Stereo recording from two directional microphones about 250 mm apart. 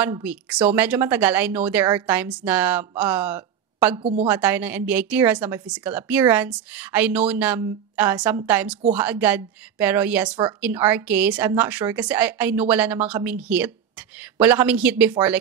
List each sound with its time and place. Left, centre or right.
0.0 s a woman's voice: centre
4.0 s a woman's voice: right
4.3 s a woman's voice: centre